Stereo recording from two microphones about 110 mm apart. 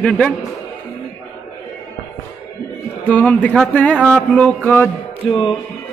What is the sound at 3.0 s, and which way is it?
Speech, 15° left (ahead or behind).